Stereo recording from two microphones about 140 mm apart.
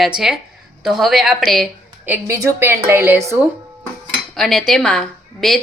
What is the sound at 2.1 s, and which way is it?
A woman's voice, 20° right (ahead or behind).